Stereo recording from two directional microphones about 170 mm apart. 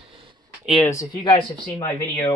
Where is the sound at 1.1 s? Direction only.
30° left (ahead or behind).